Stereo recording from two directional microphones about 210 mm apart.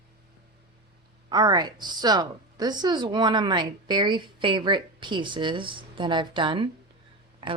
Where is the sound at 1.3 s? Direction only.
20° right (ahead or behind).